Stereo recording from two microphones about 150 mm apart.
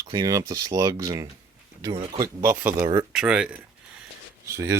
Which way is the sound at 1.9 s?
35° right (ahead or behind).